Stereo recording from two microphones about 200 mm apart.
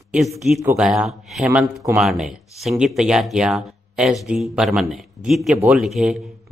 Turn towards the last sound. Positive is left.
turn(degrees=0)  # may be behind; listen again after turning